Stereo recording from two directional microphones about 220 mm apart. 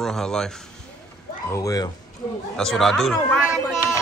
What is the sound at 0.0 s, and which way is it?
Speech, centre (ahead or behind).